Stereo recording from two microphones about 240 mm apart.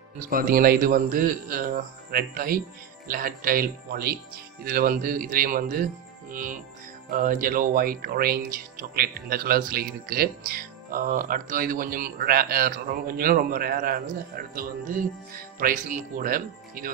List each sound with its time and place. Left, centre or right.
0.3 s speech: right